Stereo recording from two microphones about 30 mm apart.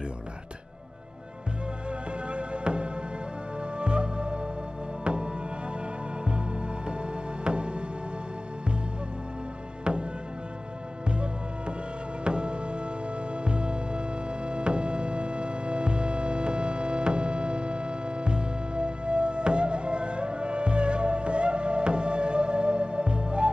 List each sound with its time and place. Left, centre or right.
1.9 s music: right
6.9 s music: right
9.9 s music: right
11.1 s music: right